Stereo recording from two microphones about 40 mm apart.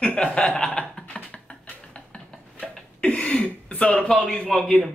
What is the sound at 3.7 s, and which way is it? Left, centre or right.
Speech, left.